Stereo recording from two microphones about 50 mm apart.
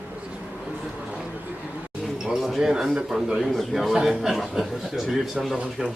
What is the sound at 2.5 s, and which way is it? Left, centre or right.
A man's voice, centre.